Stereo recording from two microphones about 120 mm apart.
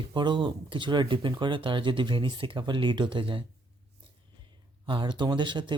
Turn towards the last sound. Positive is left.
turn(degrees=-40)  # may be behind; listen again after turning